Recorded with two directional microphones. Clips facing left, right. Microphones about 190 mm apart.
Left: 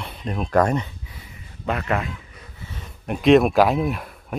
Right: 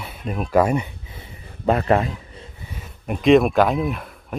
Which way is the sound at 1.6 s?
35° right (ahead or behind).